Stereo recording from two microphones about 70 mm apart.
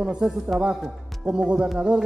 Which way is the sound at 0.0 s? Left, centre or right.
Centre.